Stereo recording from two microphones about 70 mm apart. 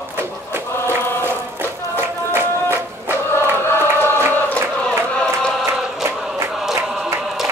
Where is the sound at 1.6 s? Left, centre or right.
Right.